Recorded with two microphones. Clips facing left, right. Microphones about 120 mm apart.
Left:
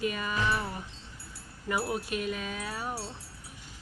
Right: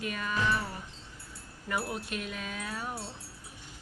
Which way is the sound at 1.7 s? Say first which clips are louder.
Left 3 dB; 5° left (ahead or behind).